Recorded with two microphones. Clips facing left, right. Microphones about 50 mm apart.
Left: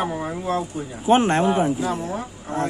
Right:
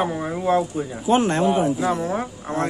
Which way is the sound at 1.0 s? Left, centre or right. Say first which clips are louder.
Left 2 dB; left.